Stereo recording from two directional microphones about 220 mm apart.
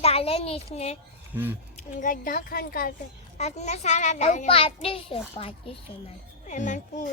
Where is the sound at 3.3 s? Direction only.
30° left (ahead or behind).